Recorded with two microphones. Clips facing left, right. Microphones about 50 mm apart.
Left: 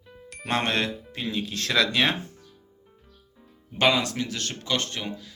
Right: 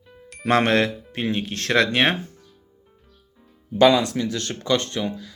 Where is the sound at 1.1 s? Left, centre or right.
Right.